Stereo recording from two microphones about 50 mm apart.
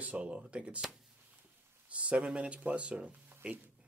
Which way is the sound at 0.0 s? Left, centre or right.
Right.